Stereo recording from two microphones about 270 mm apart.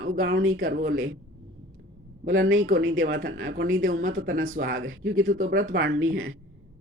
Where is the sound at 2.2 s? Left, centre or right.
Right.